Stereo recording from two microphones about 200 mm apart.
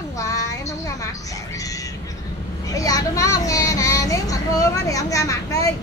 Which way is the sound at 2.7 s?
15° left (ahead or behind).